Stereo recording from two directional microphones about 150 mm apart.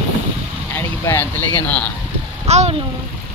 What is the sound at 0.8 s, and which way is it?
Vehicle, 15° left (ahead or behind).